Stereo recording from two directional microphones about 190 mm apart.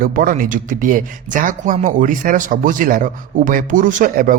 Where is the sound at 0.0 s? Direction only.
50° right (ahead or behind).